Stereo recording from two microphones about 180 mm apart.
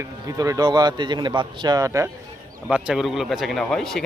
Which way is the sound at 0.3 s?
20° right (ahead or behind).